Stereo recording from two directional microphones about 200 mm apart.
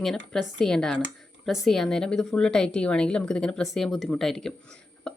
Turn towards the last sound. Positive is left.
turn(degrees=5)  # may be behind; listen again after turning